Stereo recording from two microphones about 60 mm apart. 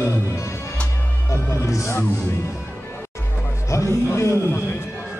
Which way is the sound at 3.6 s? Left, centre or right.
Left.